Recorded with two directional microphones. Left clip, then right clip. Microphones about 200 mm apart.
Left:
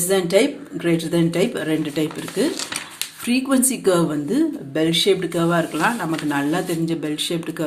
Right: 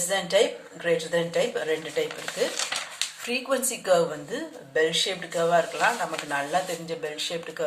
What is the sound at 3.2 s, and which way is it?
Speech, 50° left (ahead or behind).